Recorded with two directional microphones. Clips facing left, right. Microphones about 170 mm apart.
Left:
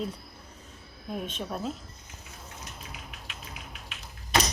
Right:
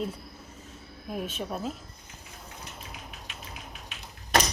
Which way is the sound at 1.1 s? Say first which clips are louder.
Right 1 dB; 5° right (ahead or behind).